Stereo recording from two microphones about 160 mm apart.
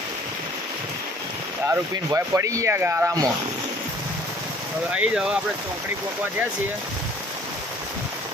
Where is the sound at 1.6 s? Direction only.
15° right (ahead or behind).